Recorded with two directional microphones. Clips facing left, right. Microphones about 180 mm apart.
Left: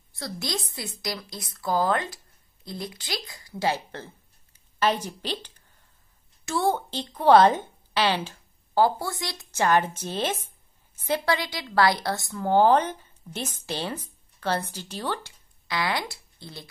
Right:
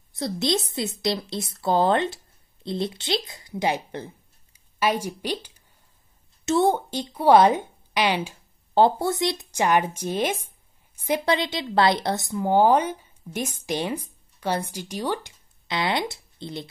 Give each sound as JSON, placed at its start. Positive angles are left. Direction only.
{"t": 0.1, "sound": "a woman's voice", "side_deg": -20}
{"t": 8.7, "sound": "a woman's voice", "side_deg": -25}